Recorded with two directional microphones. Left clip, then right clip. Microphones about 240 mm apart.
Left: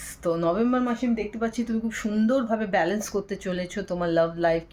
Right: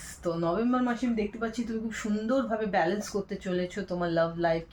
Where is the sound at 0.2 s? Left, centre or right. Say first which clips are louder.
Left 5 dB; left.